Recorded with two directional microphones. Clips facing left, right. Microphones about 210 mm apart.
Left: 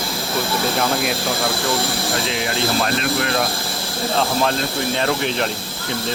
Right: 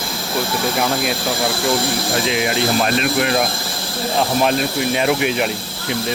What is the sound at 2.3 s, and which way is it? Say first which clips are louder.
Speech: right 5 dB; 15° right (ahead or behind).